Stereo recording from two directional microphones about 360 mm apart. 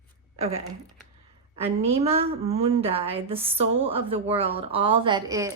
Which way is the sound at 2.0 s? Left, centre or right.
Centre.